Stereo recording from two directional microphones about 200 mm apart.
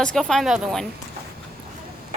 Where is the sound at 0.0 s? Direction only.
5° left (ahead or behind).